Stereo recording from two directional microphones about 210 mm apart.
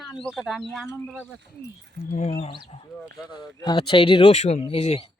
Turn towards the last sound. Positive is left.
turn(degrees=30)  # may be behind; listen again after turning